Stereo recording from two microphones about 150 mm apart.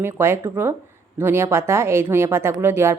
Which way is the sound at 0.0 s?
15° right (ahead or behind).